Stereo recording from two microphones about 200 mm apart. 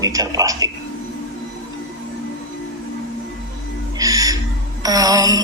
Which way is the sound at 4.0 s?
15° right (ahead or behind).